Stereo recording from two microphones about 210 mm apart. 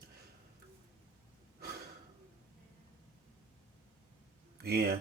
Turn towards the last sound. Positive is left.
turn(degrees=-50)  # may be behind; listen again after turning